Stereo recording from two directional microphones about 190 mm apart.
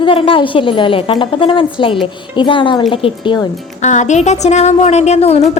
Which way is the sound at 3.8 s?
40° left (ahead or behind).